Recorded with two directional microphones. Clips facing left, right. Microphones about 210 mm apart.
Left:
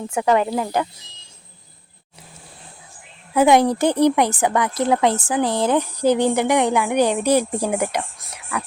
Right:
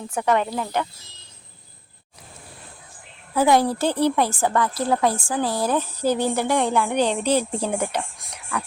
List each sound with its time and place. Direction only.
0.3 s speech: 20° left (ahead or behind)
3.3 s a woman's voice: 20° left (ahead or behind)